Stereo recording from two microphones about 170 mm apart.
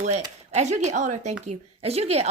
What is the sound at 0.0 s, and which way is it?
A woman's voice, 40° right (ahead or behind).